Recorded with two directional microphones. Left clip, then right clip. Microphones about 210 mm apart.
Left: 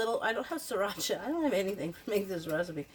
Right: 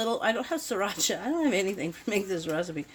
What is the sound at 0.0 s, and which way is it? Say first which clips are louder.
Speech: right 4 dB; 35° right (ahead or behind).